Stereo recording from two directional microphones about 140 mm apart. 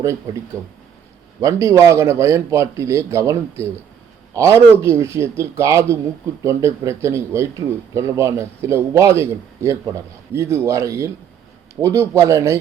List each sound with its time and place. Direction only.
1.4 s a man's voice: 25° right (ahead or behind)
4.4 s a man's voice: 20° right (ahead or behind)